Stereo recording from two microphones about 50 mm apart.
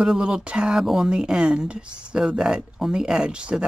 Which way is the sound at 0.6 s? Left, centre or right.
Centre.